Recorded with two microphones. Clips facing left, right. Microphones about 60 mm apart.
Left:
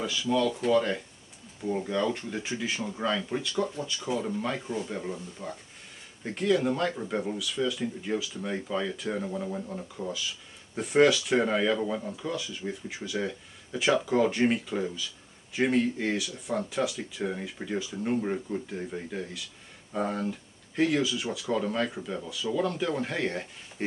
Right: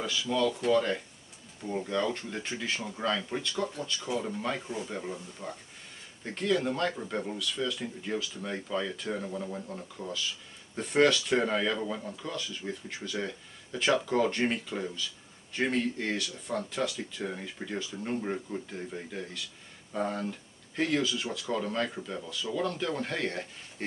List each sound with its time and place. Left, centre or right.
0.0 s speech: centre